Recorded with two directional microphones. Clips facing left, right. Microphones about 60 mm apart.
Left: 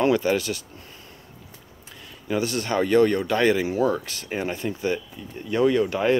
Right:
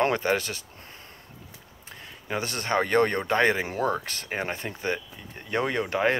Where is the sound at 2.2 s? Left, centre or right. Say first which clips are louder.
Left 5 dB; right.